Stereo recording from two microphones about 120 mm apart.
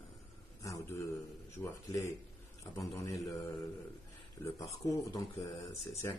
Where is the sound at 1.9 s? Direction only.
30° left (ahead or behind).